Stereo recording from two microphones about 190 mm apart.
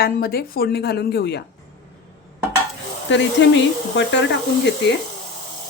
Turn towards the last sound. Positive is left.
turn(degrees=65)  # may be behind; listen again after turning